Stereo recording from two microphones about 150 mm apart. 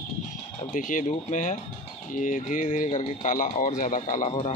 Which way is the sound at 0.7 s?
60° left (ahead or behind).